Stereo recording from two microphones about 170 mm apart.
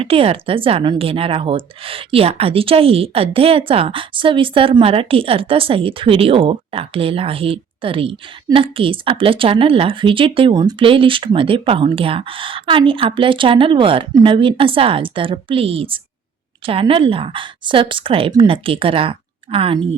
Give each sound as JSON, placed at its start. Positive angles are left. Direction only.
{"t": 0.0, "sound": "a woman's voice", "side_deg": -35}